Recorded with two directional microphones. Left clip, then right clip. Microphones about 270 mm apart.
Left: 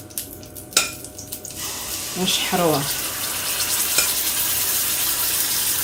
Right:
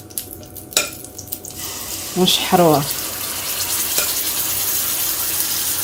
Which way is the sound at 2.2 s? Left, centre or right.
Right.